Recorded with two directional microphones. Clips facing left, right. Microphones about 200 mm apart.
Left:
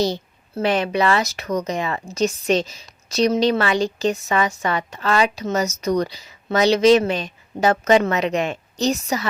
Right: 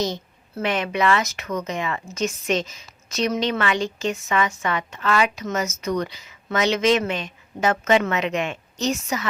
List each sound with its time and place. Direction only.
0.0 s speech: 35° left (ahead or behind)